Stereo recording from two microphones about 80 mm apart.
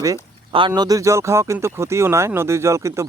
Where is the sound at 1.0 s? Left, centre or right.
Right.